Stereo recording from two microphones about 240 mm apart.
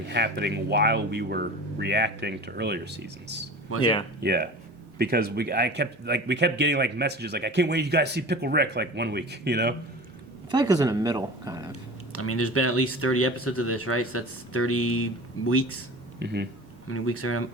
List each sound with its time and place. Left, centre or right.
0.1 s speech: right
3.7 s speech: left
4.2 s speech: right
10.5 s speech: centre
12.1 s speech: left
16.2 s speech: right
16.9 s speech: left